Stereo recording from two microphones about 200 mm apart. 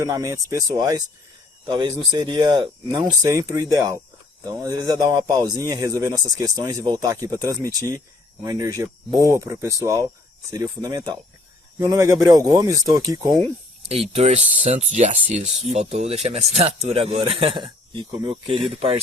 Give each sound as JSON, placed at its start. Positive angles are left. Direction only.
{"t": 0.0, "sound": "speech", "side_deg": -15}
{"t": 13.8, "sound": "speech", "side_deg": -30}